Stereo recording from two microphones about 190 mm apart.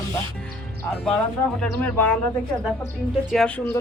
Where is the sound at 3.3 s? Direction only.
5° left (ahead or behind).